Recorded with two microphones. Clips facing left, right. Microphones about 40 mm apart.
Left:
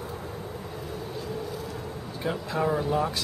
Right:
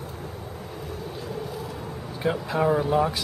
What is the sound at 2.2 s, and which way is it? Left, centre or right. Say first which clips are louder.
Speech: right 4 dB; centre.